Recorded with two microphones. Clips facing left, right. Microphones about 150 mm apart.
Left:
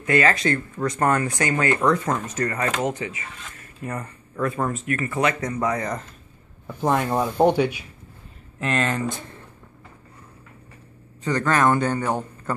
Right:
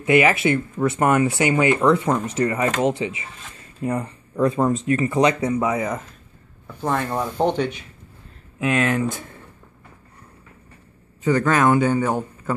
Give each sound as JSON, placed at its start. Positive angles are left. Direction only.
{"t": 0.0, "sound": "speech", "side_deg": -15}
{"t": 6.7, "sound": "speech", "side_deg": 15}
{"t": 8.5, "sound": "speech", "side_deg": -5}
{"t": 11.2, "sound": "speech", "side_deg": -10}